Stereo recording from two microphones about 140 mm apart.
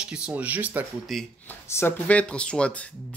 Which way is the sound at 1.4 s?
15° left (ahead or behind).